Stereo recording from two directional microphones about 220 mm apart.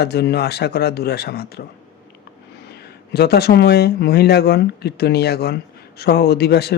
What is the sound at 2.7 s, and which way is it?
Speech, 45° left (ahead or behind).